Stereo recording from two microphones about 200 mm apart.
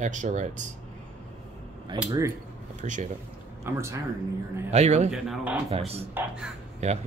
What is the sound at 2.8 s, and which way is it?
Speech, 35° right (ahead or behind).